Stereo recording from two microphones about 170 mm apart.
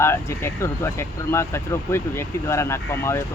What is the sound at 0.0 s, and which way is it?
Speech, 15° left (ahead or behind).